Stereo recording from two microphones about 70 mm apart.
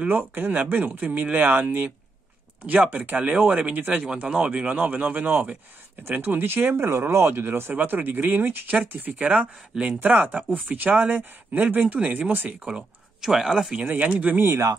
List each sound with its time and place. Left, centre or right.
0.1 s speech: right
6.9 s speech: right
9.2 s speech: centre
13.8 s speech: right
14.5 s speech: right